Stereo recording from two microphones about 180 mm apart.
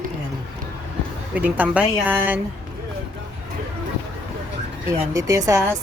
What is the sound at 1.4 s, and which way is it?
A woman's voice, 10° right (ahead or behind).